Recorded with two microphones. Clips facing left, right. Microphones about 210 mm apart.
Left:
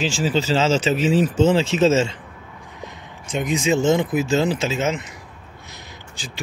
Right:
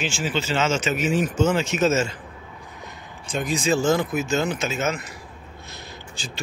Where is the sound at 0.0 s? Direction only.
35° left (ahead or behind).